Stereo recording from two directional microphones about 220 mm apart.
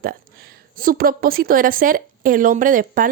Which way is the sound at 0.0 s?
40° right (ahead or behind).